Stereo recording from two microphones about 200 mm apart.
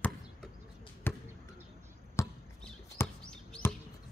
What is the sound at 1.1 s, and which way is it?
Basketball bounce, 10° left (ahead or behind).